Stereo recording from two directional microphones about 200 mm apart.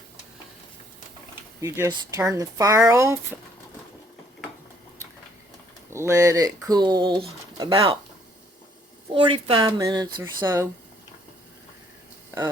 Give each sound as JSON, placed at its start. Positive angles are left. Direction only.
{"t": 1.6, "sound": "speech", "side_deg": -15}
{"t": 5.9, "sound": "speech", "side_deg": -15}
{"t": 9.1, "sound": "speech", "side_deg": -25}